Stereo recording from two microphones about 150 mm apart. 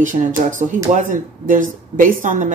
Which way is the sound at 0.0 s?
55° right (ahead or behind).